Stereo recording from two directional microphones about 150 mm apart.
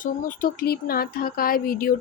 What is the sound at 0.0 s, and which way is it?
Speech, 65° left (ahead or behind).